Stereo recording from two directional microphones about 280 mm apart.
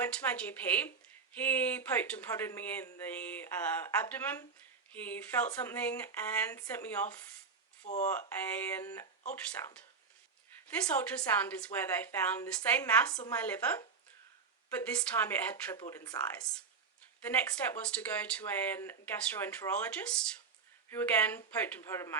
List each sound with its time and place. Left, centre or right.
0.0 s speech: centre
10.9 s speech: centre